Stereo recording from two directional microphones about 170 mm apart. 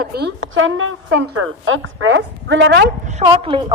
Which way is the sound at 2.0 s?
90° right.